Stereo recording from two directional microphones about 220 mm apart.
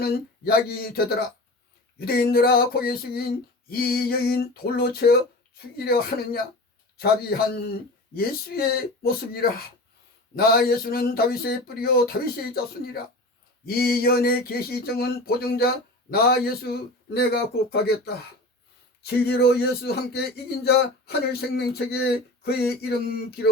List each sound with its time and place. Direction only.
0.0 s speech: 45° left (ahead or behind)